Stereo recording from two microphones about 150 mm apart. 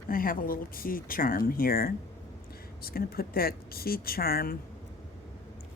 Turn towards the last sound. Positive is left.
turn(degrees=80)